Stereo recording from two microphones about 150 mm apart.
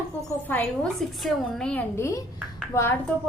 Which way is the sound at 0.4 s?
10° left (ahead or behind).